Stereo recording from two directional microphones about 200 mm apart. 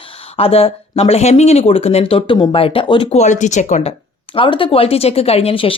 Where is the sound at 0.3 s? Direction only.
30° left (ahead or behind).